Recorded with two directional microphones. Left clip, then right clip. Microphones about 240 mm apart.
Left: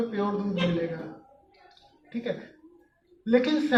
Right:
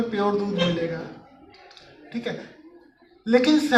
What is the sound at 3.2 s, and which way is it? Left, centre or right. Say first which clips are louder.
Speech: right 5 dB; right.